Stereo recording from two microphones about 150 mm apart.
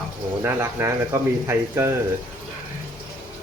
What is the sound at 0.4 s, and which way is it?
Speech, 15° right (ahead or behind).